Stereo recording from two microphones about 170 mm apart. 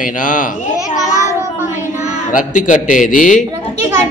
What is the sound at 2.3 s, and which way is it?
A man's voice, 50° left (ahead or behind).